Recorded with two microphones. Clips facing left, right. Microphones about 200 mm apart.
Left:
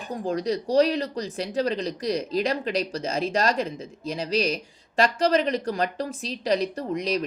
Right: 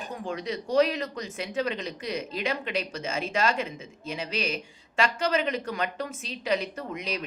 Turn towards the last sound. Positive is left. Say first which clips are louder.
# left 7 dB
turn(degrees=35)  # may be behind; listen again after turning